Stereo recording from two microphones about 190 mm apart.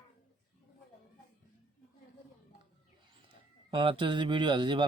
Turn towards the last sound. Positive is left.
turn(degrees=-25)  # may be behind; listen again after turning